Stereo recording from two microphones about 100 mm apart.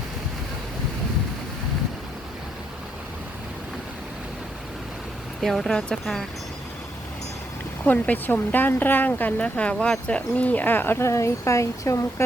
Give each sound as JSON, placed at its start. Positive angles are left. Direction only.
{"t": 5.4, "sound": "speech", "side_deg": 0}
{"t": 7.9, "sound": "speech", "side_deg": 15}